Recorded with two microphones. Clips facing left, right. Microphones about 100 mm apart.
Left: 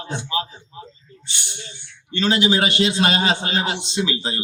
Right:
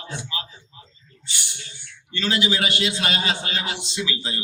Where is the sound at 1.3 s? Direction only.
20° left (ahead or behind).